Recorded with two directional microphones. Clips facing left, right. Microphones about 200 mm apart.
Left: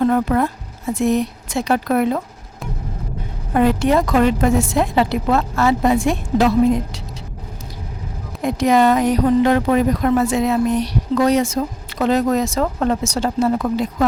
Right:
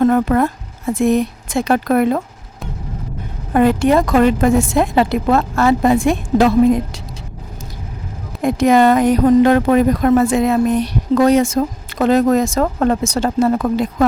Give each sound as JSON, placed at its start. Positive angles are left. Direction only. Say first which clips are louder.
{"t": 0.0, "sound": "speech", "louder": "right 3 dB", "side_deg": -50}
{"t": 3.5, "sound": "speech", "louder": "right 3 dB", "side_deg": -55}
{"t": 8.4, "sound": "speech", "louder": "right 3 dB", "side_deg": -50}